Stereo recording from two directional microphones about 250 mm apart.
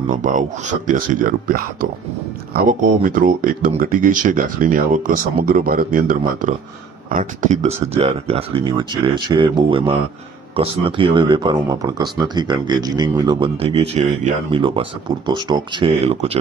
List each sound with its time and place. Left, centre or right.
0.1 s speech: right